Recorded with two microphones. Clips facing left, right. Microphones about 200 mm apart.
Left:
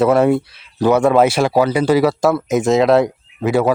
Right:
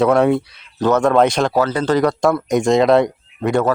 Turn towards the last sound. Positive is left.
turn(degrees=5)  # may be behind; listen again after turning